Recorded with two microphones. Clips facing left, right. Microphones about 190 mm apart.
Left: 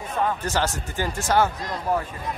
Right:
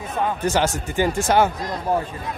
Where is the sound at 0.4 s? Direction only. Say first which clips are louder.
Right 5 dB; 15° right (ahead or behind).